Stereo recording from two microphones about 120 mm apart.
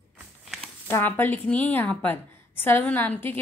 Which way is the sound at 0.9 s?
15° left (ahead or behind).